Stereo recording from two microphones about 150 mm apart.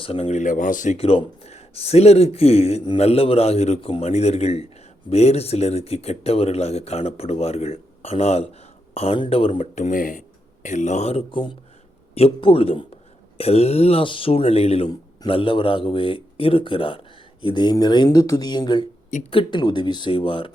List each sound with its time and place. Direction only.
0.0 s speech: 40° left (ahead or behind); by 0.9 s 60° left (ahead or behind)
0.9 s a man's voice: 40° left (ahead or behind)